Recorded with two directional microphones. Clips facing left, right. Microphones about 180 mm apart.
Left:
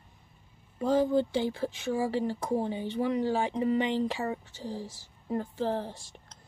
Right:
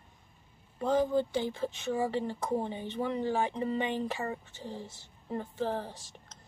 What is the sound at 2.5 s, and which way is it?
A woman's voice, 10° left (ahead or behind).